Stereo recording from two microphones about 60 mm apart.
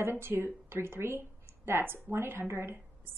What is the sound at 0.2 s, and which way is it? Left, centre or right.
A woman's voice, right.